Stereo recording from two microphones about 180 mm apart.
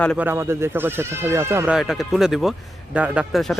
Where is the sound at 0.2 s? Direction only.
10° right (ahead or behind).